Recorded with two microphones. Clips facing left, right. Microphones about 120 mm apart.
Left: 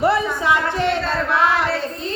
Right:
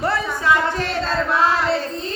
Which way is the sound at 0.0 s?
20° left (ahead or behind).